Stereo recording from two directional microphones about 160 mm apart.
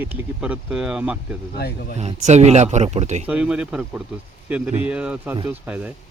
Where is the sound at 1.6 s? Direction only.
80° left.